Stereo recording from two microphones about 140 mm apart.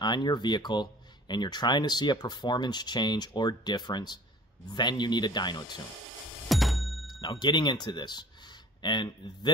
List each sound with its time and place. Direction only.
0.0 s speech: 30° left (ahead or behind)
6.5 s music: centre (ahead or behind)
7.2 s speech: 30° left (ahead or behind)